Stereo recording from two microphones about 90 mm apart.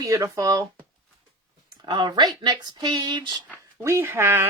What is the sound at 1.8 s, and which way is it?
Speech, 55° right (ahead or behind).